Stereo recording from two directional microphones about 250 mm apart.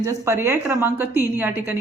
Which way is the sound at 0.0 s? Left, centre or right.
Centre.